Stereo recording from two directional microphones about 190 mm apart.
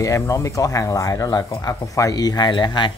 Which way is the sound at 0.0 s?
15° left (ahead or behind).